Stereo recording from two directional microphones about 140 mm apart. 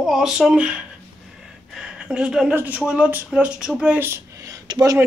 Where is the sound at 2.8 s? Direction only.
10° right (ahead or behind).